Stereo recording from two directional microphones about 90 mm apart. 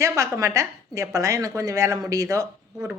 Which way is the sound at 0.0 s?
35° right (ahead or behind).